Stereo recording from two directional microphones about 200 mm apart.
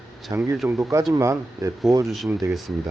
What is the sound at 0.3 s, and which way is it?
Speech, 15° right (ahead or behind).